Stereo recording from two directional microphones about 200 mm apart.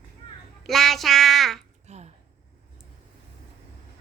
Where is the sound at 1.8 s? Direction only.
35° right (ahead or behind).